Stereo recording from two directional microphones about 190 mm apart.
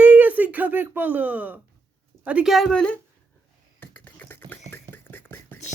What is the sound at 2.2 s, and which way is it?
Speech, 5° right (ahead or behind).